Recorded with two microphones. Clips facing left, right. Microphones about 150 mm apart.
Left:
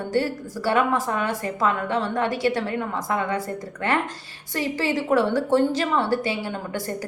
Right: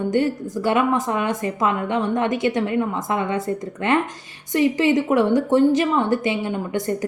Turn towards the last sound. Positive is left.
turn(degrees=-20)  # may be behind; listen again after turning